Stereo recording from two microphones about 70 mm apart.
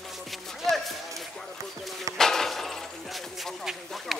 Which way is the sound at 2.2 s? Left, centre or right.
Centre.